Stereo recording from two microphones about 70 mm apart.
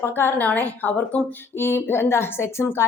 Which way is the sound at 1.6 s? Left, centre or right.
Left.